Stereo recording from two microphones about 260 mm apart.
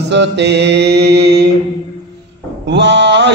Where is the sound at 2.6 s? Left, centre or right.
Right.